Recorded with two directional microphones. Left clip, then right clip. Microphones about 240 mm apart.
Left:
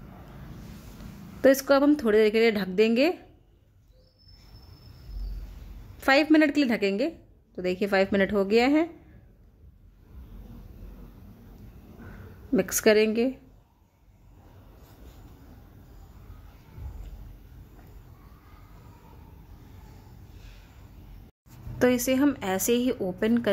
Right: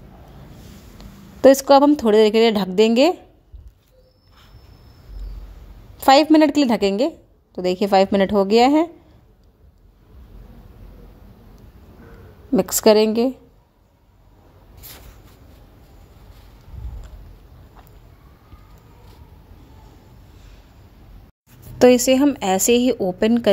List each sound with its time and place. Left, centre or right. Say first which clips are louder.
1.4 s a woman's voice: right 9 dB; right
5.9 s a woman's voice: right 8 dB; right
12.5 s a woman's voice: right 7 dB; right
21.7 s a woman's voice: right 10 dB; right